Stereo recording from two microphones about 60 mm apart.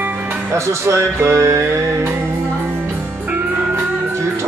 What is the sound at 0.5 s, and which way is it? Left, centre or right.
Speech, right.